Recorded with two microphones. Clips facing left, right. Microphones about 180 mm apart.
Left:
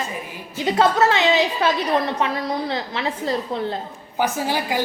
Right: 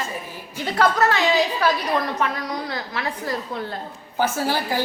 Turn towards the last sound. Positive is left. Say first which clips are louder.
# even
turn(degrees=15)  # may be behind; listen again after turning